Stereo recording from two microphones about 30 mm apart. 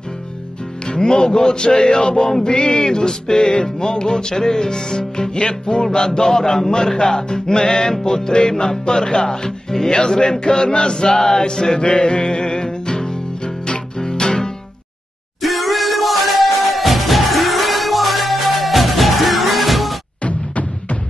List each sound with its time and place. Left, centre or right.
0.8 s music: left
15.4 s music: centre
20.2 s a sound: left